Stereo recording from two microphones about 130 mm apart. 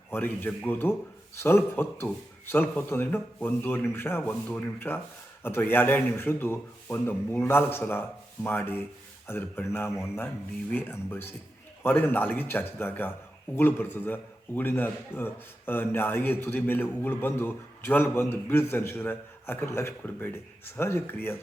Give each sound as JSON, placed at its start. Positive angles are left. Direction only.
{"t": 0.1, "sound": "a man's voice", "side_deg": 15}